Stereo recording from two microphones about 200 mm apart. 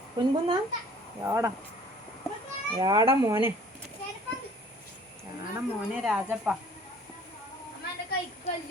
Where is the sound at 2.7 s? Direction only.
20° right (ahead or behind).